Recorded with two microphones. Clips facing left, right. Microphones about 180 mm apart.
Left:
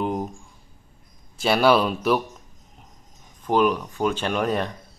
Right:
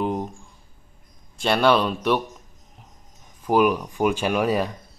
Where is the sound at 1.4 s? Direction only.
5° left (ahead or behind).